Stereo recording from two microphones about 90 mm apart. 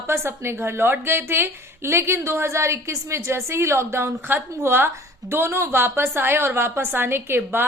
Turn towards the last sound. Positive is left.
turn(degrees=-25)  # may be behind; listen again after turning